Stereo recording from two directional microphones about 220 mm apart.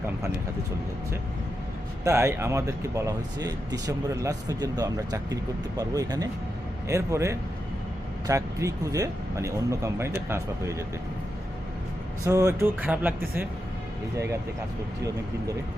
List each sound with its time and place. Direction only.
2.0 s speech: 10° right (ahead or behind)
12.2 s speech: 15° right (ahead or behind)